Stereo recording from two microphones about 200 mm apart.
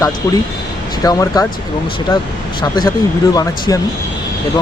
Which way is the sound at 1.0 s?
20° left (ahead or behind).